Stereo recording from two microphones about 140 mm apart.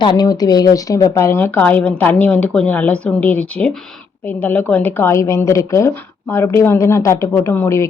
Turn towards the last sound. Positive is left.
turn(degrees=20)  # may be behind; listen again after turning